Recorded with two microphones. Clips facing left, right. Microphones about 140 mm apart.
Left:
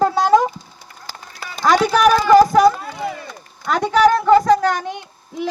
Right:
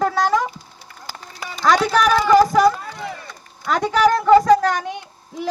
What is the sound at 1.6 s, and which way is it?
Speech, 10° left (ahead or behind).